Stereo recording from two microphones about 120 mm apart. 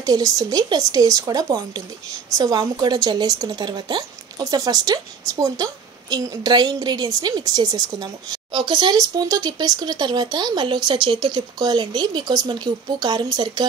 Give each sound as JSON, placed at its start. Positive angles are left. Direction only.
{"t": 0.0, "sound": "speech", "side_deg": -30}